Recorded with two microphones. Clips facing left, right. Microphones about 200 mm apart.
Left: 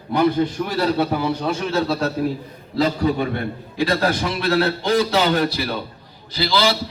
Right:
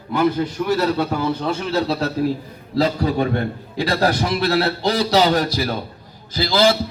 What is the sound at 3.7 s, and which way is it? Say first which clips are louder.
A man's voice: right 1 dB; 35° right (ahead or behind).